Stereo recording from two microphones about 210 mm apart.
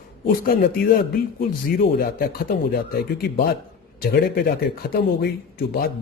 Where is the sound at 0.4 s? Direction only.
45° left (ahead or behind).